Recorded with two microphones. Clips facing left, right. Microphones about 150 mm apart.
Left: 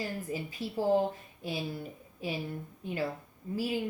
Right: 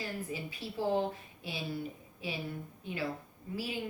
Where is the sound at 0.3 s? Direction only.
45° left (ahead or behind).